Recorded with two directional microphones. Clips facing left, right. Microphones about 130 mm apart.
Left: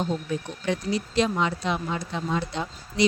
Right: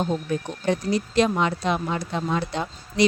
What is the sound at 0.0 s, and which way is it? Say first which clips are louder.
Speech: right 3 dB; 50° right (ahead or behind).